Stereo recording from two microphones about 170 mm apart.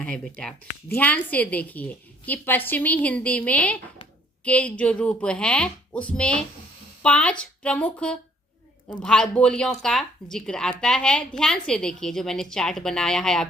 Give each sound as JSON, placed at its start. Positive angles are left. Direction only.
{"t": 0.0, "sound": "a woman's voice", "side_deg": 5}